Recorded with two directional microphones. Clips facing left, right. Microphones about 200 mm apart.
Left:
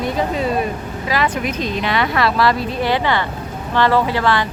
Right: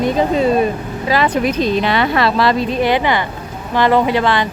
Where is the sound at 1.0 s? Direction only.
30° right (ahead or behind).